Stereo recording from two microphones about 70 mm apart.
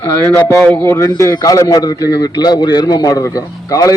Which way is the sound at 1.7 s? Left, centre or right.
Left.